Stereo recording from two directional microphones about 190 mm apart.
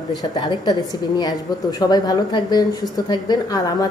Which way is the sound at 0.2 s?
20° left (ahead or behind).